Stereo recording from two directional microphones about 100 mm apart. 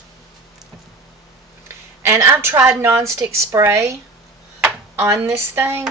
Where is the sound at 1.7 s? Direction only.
25° right (ahead or behind).